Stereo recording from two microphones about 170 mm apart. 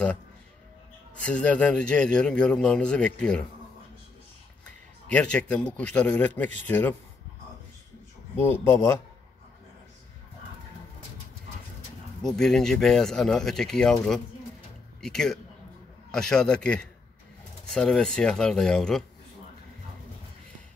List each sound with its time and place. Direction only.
1.2 s a man's voice: 10° left (ahead or behind)
5.0 s a man's voice: 5° left (ahead or behind)
8.4 s a man's voice: 15° left (ahead or behind)
12.2 s a man's voice: centre (ahead or behind)